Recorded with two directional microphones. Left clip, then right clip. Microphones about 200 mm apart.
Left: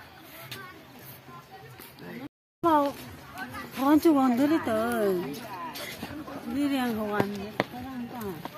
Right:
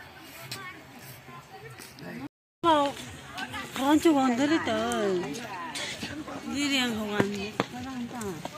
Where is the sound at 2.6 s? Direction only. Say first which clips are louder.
Even; 60° left (ahead or behind).